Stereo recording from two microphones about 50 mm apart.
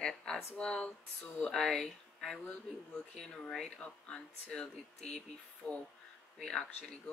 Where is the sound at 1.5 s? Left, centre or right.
Centre.